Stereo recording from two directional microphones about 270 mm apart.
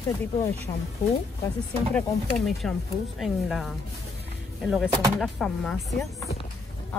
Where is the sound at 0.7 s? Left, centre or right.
Centre.